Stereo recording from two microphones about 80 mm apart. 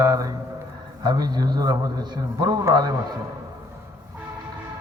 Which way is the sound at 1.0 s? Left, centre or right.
Right.